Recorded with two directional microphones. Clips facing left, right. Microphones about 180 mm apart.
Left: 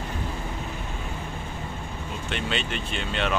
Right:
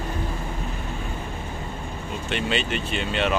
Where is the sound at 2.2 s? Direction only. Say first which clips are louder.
Right 4 dB; centre (ahead or behind).